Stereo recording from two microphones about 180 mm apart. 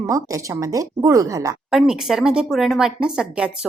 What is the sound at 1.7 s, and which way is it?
Speech, centre (ahead or behind).